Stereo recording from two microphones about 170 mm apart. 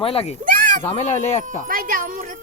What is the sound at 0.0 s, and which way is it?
Speech, 35° left (ahead or behind).